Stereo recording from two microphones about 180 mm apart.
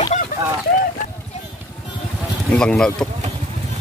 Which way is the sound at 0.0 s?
40° left (ahead or behind).